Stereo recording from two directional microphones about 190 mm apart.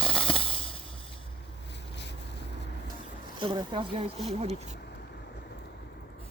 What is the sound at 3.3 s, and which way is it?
Speech, 25° right (ahead or behind).